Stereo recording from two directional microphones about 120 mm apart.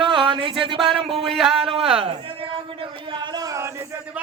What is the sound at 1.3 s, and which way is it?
Speech, 5° right (ahead or behind).